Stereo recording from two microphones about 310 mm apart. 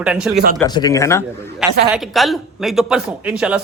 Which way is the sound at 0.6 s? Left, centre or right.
Centre.